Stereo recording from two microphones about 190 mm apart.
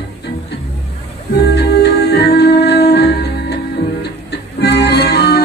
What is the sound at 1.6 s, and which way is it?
Music, 60° left (ahead or behind).